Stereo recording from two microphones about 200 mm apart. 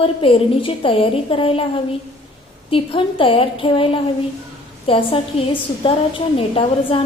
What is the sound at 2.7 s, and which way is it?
A woman's voice, 25° left (ahead or behind).